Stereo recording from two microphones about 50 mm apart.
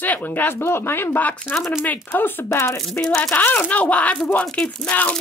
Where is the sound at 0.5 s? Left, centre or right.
Left.